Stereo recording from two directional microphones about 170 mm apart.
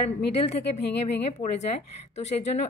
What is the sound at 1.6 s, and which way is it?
Speech, 40° left (ahead or behind).